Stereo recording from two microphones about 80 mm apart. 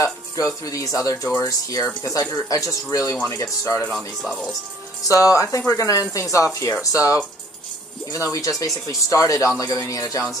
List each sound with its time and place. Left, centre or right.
0.6 s speech: left
3.9 s speech: centre
5.0 s speech: left